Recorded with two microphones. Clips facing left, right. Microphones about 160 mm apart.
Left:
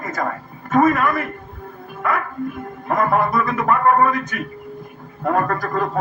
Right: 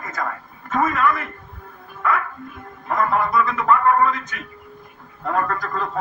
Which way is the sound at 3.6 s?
55° left (ahead or behind).